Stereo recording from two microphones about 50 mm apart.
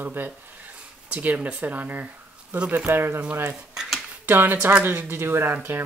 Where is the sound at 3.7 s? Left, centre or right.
Centre.